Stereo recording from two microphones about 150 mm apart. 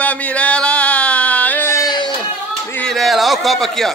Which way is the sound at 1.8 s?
30° left (ahead or behind).